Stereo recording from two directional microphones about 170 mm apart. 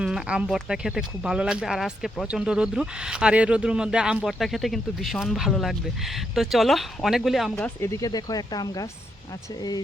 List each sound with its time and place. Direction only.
0.0 s speech: 5° right (ahead or behind)
7.5 s speech: 15° left (ahead or behind)